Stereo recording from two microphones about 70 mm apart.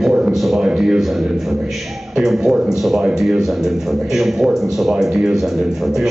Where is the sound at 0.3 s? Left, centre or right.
Centre.